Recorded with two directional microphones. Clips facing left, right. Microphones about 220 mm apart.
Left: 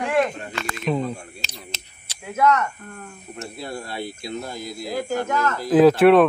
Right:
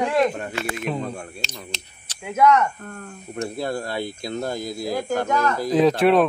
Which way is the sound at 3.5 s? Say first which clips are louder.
Right 4 dB; 50° right (ahead or behind).